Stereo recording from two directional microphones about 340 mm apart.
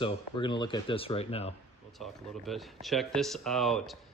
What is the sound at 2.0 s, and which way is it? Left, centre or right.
Speech, centre.